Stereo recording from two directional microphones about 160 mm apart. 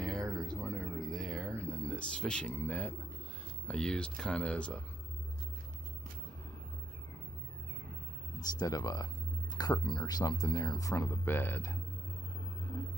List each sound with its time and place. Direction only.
0.0 s a sound: 5° left (ahead or behind)
1.6 s speech: 10° left (ahead or behind)
8.4 s speech: 25° left (ahead or behind)